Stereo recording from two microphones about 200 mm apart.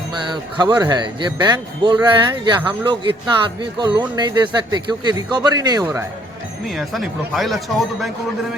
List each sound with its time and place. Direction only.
0.3 s a man's voice: 20° right (ahead or behind)
6.7 s speech: centre (ahead or behind)